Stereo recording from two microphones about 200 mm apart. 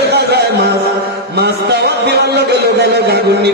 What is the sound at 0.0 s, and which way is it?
Music, 55° right (ahead or behind).